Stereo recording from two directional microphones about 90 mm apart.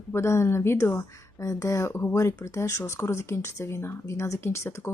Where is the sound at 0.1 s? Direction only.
30° left (ahead or behind).